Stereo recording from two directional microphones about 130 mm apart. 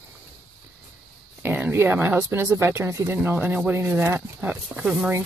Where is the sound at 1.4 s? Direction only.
15° right (ahead or behind).